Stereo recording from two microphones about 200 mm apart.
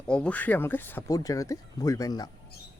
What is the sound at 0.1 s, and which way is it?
Speech, 5° left (ahead or behind).